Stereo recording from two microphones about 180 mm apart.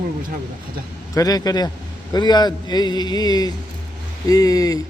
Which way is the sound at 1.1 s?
20° left (ahead or behind).